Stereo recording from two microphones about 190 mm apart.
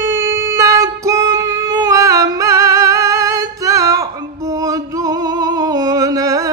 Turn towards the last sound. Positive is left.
turn(degrees=-20)  # may be behind; listen again after turning